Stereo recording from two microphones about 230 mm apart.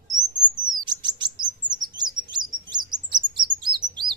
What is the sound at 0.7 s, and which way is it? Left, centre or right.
Chirp, centre.